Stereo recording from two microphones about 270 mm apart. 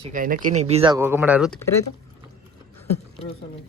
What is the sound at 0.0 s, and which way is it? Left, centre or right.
Speech, right.